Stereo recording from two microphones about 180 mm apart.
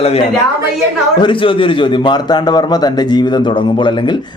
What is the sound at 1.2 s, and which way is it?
A man's voice, 30° left (ahead or behind).